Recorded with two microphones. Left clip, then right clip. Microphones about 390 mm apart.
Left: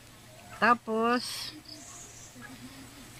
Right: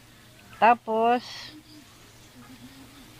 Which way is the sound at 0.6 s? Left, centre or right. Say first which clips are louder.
Right 5 dB; centre.